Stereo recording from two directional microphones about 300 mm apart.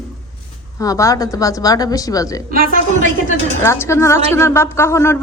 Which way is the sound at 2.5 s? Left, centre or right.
Right.